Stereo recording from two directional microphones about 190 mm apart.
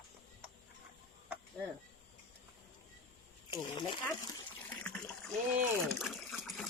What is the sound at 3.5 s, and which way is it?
Speech, 25° left (ahead or behind).